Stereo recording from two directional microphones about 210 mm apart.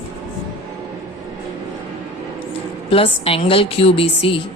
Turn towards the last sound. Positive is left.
turn(degrees=25)  # may be behind; listen again after turning